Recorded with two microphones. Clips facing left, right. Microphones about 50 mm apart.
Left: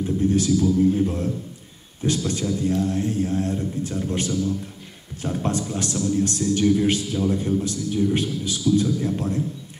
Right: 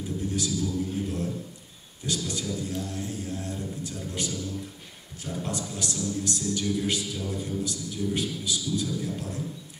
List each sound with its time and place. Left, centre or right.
0.2 s a man's voice: left